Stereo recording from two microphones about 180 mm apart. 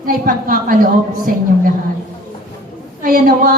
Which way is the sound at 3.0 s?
55° right (ahead or behind).